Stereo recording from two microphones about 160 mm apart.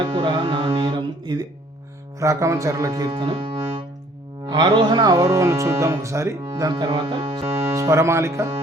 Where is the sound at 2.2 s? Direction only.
20° right (ahead or behind).